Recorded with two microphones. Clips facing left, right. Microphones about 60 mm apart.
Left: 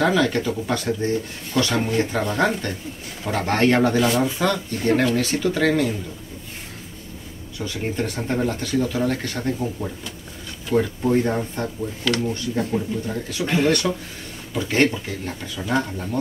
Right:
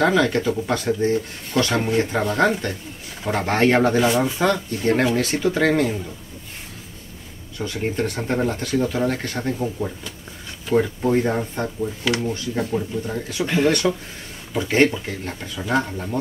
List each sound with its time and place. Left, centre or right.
0.0 s speech: centre
2.2 s speech: centre
3.3 s speech: centre
8.2 s speech: centre
13.7 s speech: right
14.5 s speech: centre